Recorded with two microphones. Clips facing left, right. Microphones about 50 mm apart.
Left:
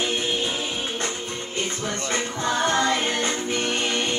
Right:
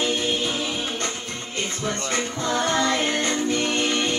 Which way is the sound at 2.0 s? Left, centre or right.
Left.